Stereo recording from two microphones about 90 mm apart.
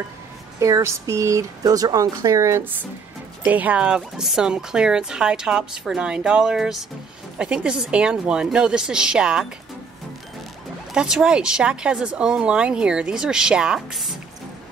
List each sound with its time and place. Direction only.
0.6 s speech: 35° right (ahead or behind)
3.4 s speech: 15° right (ahead or behind)
10.9 s speech: 5° right (ahead or behind)